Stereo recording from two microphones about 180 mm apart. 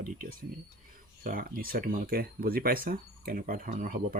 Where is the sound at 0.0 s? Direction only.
55° right (ahead or behind).